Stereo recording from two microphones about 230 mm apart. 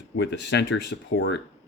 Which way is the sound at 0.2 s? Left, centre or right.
Left.